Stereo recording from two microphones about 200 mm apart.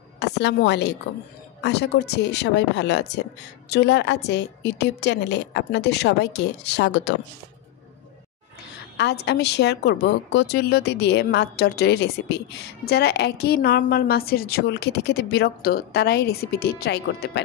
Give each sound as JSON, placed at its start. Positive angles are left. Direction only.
{"t": 0.2, "sound": "a woman's voice", "side_deg": 60}
{"t": 8.9, "sound": "a woman's voice", "side_deg": 55}